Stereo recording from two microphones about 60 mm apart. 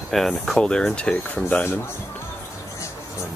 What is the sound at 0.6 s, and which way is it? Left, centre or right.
Speech, centre.